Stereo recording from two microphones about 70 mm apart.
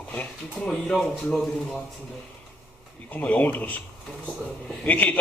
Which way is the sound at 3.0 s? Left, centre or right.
Left.